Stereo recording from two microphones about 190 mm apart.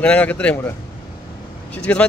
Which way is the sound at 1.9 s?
10° left (ahead or behind).